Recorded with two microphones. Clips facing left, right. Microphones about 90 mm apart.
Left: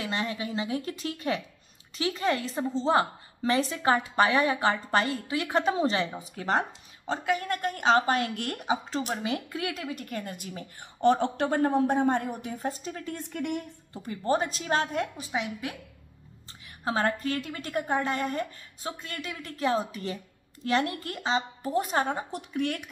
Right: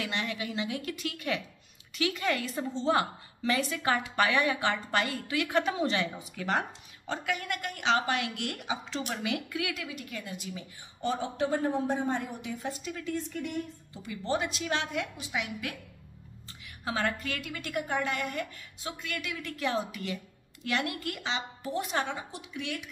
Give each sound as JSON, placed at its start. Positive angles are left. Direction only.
{"t": 0.0, "sound": "a woman's voice", "side_deg": 35}
{"t": 13.1, "sound": "a woman's voice", "side_deg": 55}
{"t": 14.0, "sound": "a woman's voice", "side_deg": 40}
{"t": 16.8, "sound": "a woman's voice", "side_deg": 35}